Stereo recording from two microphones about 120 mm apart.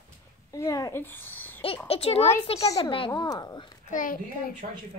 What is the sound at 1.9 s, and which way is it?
A child's voice, 55° left (ahead or behind).